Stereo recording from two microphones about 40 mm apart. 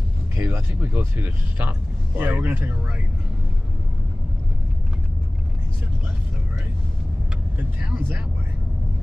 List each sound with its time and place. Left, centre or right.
0.4 s speech: right
7.5 s speech: right